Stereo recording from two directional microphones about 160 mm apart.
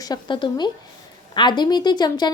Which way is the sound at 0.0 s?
25° left (ahead or behind).